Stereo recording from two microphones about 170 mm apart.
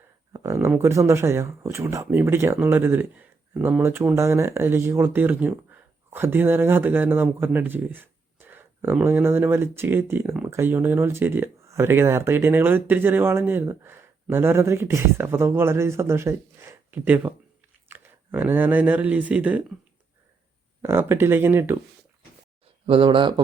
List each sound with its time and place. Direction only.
0.3 s a man's voice: 15° right (ahead or behind)
20.8 s a man's voice: 15° right (ahead or behind)
22.9 s a man's voice: 30° right (ahead or behind)